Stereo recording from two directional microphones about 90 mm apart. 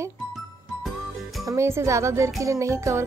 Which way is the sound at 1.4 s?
35° right (ahead or behind).